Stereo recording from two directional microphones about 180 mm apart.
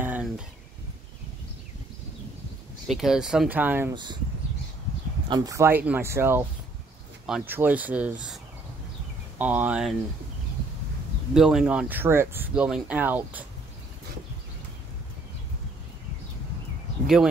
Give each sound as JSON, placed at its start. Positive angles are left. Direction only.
{"t": 0.0, "sound": "a sound", "side_deg": -10}
{"t": 2.9, "sound": "speech", "side_deg": 0}
{"t": 3.9, "sound": "speech", "side_deg": -25}
{"t": 5.3, "sound": "speech", "side_deg": -20}
{"t": 9.4, "sound": "speech", "side_deg": -10}
{"t": 11.3, "sound": "speech", "side_deg": 0}